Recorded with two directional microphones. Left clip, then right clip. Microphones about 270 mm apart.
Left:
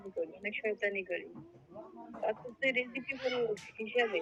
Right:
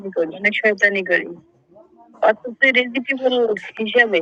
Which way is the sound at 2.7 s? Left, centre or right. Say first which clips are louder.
Right 17 dB; right.